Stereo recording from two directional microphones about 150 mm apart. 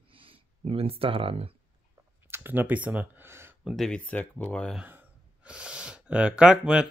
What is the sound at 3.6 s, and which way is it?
Speech, centre (ahead or behind).